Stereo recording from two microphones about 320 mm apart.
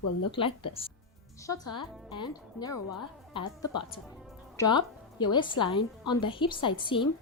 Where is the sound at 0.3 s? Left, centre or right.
Centre.